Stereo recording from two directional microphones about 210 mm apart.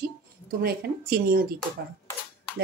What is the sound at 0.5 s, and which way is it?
Speech, 45° right (ahead or behind).